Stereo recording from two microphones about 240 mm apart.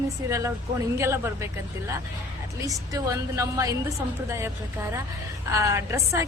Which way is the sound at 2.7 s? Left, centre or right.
Centre.